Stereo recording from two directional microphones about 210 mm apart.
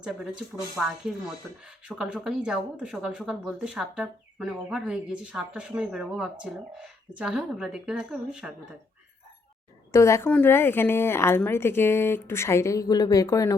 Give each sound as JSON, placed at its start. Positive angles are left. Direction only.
{"t": 0.0, "sound": "speech", "side_deg": -5}
{"t": 9.9, "sound": "a woman's voice", "side_deg": 15}